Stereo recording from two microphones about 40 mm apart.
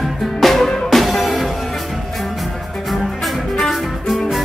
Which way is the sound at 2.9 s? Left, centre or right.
Centre.